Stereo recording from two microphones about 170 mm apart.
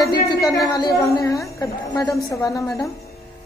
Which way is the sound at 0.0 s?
20° left (ahead or behind).